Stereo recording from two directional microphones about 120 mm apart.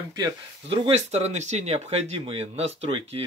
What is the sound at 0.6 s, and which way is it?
Speech, 55° right (ahead or behind).